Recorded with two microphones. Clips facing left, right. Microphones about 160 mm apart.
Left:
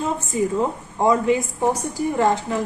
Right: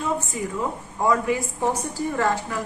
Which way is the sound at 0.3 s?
25° left (ahead or behind).